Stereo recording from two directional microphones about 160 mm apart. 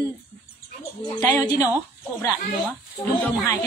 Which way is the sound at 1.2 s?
20° left (ahead or behind).